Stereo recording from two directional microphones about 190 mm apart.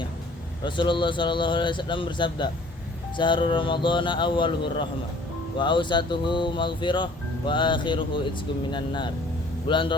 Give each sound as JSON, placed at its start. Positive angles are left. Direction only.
{"t": 0.6, "sound": "speech", "side_deg": 25}